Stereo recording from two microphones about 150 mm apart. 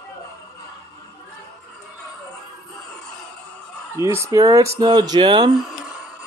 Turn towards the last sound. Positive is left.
turn(degrees=-35)  # may be behind; listen again after turning